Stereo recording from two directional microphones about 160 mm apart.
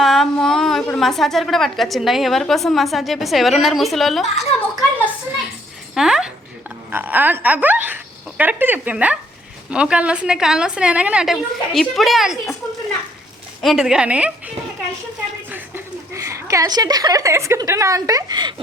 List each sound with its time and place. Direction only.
0.0 s a woman's voice: centre (ahead or behind)
4.5 s a woman's voice: 40° left (ahead or behind)
5.9 s a woman's voice: 5° right (ahead or behind)
13.6 s a woman's voice: centre (ahead or behind); by 18.5 s 25° right (ahead or behind)